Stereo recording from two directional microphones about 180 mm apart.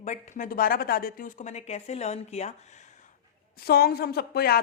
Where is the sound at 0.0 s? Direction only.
45° left (ahead or behind).